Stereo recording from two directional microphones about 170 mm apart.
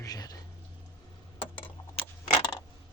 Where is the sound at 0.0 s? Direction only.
20° left (ahead or behind).